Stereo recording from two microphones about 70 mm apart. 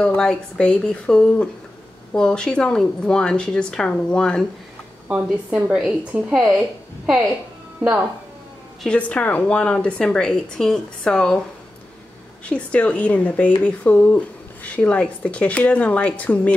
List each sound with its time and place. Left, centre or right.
0.0 s a woman's voice: centre
5.0 s a woman's voice: centre
8.8 s a woman's voice: centre
12.4 s speech: centre